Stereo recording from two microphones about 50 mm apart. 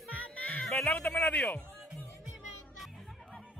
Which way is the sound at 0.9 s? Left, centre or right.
Left.